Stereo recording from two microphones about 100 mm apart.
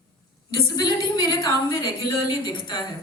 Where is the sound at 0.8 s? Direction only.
45° left (ahead or behind).